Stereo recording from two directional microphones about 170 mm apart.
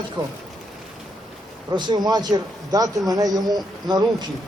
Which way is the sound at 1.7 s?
25° right (ahead or behind).